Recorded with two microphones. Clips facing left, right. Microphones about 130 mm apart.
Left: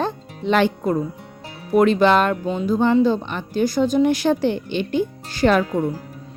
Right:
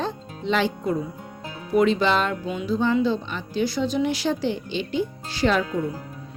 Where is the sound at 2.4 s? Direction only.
35° left (ahead or behind).